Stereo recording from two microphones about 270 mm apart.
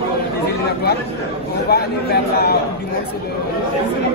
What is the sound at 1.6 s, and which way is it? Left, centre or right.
Speech, left.